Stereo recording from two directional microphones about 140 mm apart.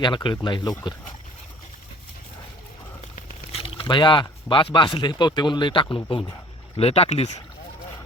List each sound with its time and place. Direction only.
0.0 s speech: 35° left (ahead or behind)
3.5 s speech: 40° left (ahead or behind)